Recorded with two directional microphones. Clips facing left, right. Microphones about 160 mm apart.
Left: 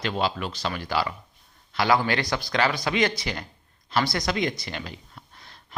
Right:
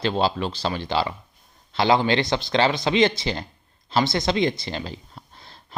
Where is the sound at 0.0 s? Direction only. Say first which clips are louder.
Right 4 dB; 30° right (ahead or behind).